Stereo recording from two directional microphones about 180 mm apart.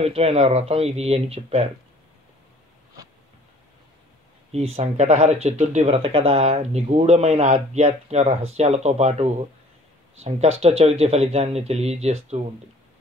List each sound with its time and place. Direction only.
0.0 s speech: 35° right (ahead or behind)
4.5 s speech: 35° right (ahead or behind)
10.6 s speech: 35° right (ahead or behind)